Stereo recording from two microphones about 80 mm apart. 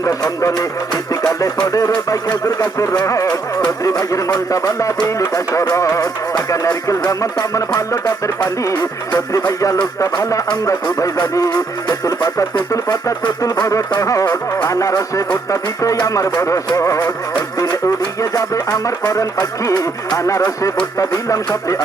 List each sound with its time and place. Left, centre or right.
0.0 s music: left
1.6 s music: left
3.2 s music: left
16.3 s music: left